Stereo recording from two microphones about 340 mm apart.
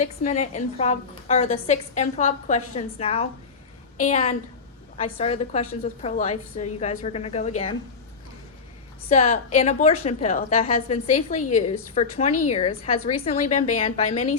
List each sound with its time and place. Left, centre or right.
0.2 s a woman's voice: centre
9.0 s a woman's voice: centre